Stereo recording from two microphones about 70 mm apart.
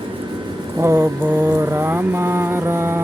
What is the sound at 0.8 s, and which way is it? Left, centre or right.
Mantra, right.